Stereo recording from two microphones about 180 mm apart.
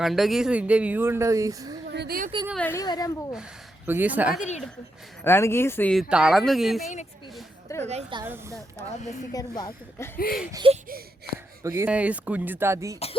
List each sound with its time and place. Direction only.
0.0 s speech: centre (ahead or behind); by 1.7 s 20° right (ahead or behind)
1.9 s speech: 65° right (ahead or behind)
2.6 s speech: 10° left (ahead or behind)
2.8 s a woman's voice: 25° left (ahead or behind)
3.8 s speech: 10° right (ahead or behind)
4.4 s a woman's voice: 40° left (ahead or behind)
5.2 s speech: 15° left (ahead or behind)
7.7 s a sound: 15° left (ahead or behind)
8.2 s speech: 15° right (ahead or behind)
9.3 s a woman's voice: 20° left (ahead or behind)
10.2 s a sound: 55° left (ahead or behind)
10.5 s a sound: 25° right (ahead or behind)
11.6 s speech: 15° right (ahead or behind)